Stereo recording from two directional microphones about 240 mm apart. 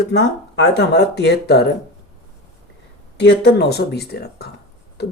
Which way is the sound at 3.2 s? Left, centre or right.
Left.